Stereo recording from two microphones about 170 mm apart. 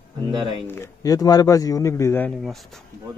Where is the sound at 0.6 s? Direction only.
15° left (ahead or behind).